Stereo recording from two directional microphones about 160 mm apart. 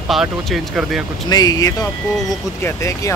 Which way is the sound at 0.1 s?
Centre (ahead or behind).